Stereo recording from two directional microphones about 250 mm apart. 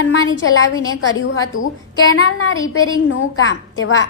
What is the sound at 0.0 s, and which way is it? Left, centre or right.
A woman's voice, left.